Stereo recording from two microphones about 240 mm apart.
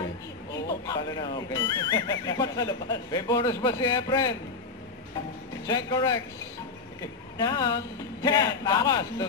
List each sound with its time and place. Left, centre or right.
0.5 s speech: centre
5.7 s speech: centre